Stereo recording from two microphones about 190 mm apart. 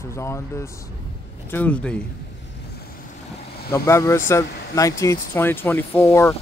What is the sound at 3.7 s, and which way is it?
Speech, 15° left (ahead or behind).